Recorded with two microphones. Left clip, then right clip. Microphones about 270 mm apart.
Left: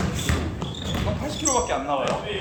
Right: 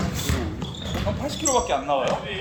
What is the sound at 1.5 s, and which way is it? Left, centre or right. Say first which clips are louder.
Basketball bounce: right 3 dB; right.